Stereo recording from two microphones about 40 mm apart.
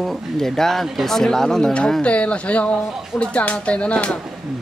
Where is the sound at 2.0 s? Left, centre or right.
Left.